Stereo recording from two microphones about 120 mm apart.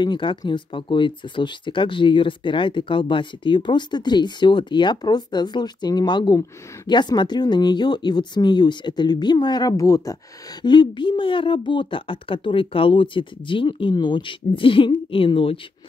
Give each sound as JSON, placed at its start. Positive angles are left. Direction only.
{"t": 0.0, "sound": "speech", "side_deg": 40}
{"t": 10.6, "sound": "speech", "side_deg": 40}